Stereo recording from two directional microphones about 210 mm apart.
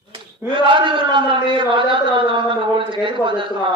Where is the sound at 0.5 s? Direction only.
25° right (ahead or behind).